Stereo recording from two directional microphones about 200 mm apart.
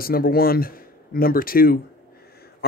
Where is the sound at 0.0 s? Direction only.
50° left (ahead or behind).